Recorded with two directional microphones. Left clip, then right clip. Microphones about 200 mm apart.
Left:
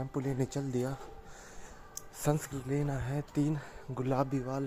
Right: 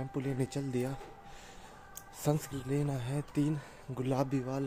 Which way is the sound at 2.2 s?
Centre (ahead or behind).